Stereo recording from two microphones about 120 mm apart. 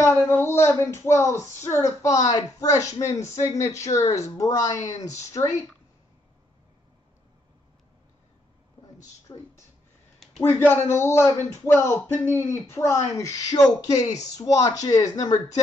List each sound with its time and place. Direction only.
0.0 s speech: 20° left (ahead or behind)
9.3 s speech: 30° left (ahead or behind)
10.4 s speech: 15° left (ahead or behind)